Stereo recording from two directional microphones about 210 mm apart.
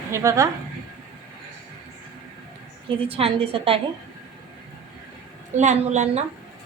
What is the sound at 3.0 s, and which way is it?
Speech, 25° right (ahead or behind).